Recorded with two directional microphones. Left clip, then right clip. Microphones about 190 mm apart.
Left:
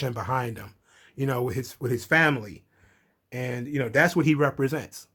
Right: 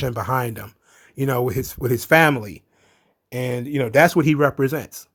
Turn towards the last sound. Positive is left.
turn(degrees=-35)  # may be behind; listen again after turning